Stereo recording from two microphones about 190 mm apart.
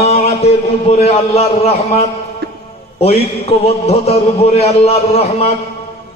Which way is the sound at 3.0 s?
35° left (ahead or behind).